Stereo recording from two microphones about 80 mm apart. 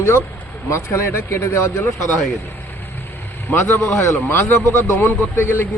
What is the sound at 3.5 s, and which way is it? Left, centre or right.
Speech, left.